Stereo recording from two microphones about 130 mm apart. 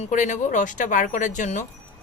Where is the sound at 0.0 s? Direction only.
70° left (ahead or behind).